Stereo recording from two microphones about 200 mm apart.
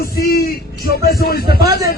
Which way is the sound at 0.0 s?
50° left (ahead or behind).